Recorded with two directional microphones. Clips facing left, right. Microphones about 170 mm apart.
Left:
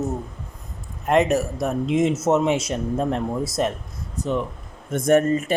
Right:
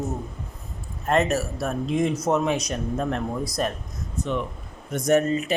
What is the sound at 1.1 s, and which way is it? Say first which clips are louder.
A man's voice: left 3 dB; 15° left (ahead or behind).